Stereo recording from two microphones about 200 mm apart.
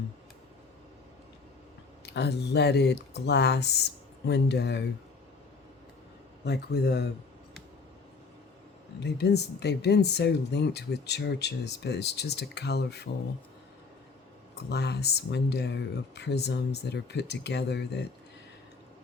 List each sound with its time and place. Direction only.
2.0 s speech: 55° left (ahead or behind)
6.4 s speech: 55° left (ahead or behind)
9.0 s speech: 55° left (ahead or behind)
14.5 s speech: 55° left (ahead or behind)